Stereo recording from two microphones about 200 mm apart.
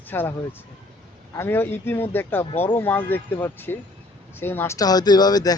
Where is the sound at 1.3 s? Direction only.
10° left (ahead or behind).